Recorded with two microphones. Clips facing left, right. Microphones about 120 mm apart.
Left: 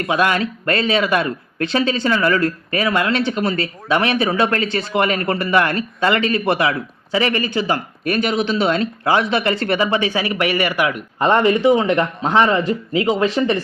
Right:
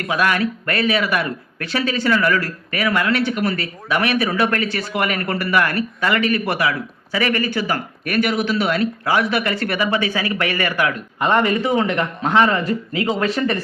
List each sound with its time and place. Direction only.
0.0 s speech: 25° left (ahead or behind)
11.2 s speech: 25° left (ahead or behind)